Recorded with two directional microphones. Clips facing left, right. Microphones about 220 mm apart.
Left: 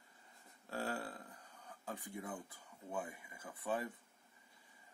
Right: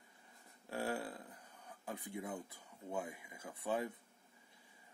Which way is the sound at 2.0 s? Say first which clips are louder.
Right 4 dB; 20° right (ahead or behind).